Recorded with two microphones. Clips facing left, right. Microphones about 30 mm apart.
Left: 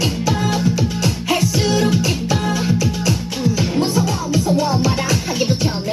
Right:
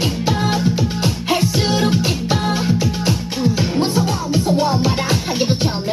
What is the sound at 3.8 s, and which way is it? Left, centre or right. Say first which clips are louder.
Music: even; right.